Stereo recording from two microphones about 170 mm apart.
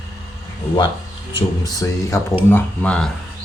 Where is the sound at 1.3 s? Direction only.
25° left (ahead or behind).